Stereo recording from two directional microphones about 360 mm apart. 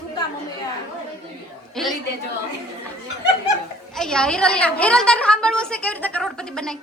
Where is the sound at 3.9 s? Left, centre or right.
Centre.